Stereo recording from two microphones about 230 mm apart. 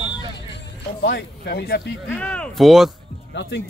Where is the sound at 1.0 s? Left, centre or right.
Left.